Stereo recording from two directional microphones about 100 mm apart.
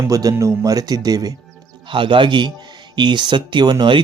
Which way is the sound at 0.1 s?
35° right (ahead or behind).